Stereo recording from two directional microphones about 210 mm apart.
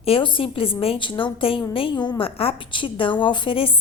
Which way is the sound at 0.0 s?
25° left (ahead or behind).